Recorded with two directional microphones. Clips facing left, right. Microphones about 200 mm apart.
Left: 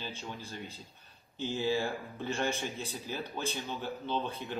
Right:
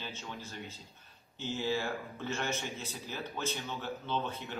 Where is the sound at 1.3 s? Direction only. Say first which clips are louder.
Left 3 dB; 15° left (ahead or behind).